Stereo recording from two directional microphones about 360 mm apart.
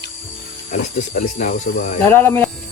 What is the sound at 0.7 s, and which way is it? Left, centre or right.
Speech, centre.